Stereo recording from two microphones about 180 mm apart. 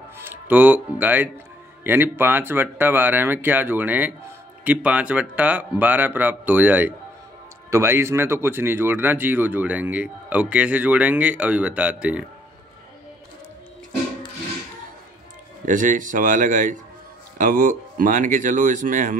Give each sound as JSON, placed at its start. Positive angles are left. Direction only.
{"t": 0.3, "sound": "speech", "side_deg": -10}
{"t": 15.6, "sound": "speech", "side_deg": -45}